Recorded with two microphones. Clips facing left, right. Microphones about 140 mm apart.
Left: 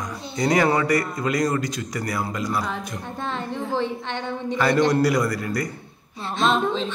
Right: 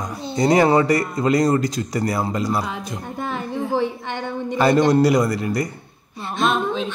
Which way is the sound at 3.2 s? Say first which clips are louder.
Right 3 dB; 5° right (ahead or behind).